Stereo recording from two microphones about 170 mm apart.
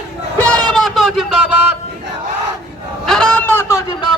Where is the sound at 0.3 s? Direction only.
10° left (ahead or behind).